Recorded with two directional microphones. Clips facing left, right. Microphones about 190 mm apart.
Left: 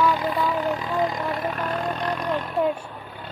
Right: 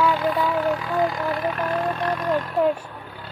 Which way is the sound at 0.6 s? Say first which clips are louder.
Right 2 dB; 15° left (ahead or behind).